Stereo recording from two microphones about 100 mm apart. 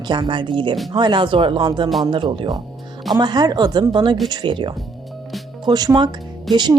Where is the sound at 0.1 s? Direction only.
50° right (ahead or behind).